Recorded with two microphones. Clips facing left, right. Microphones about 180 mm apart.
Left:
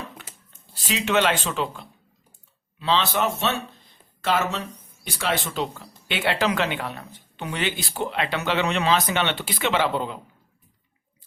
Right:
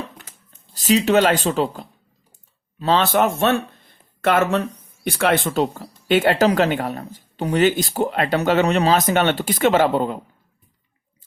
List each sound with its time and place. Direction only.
0.5 s speech: 40° right (ahead or behind)